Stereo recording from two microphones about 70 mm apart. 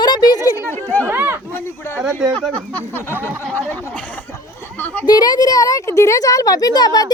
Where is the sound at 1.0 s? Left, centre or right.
Right.